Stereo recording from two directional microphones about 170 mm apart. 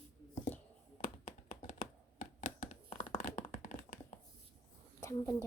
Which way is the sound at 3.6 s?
50° left (ahead or behind).